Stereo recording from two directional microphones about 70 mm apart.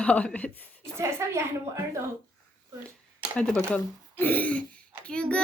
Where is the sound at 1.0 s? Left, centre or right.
Right.